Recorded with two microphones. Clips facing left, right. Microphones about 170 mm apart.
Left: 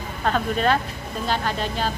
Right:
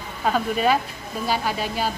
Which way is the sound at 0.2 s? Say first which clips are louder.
Right 1 dB; 5° right (ahead or behind).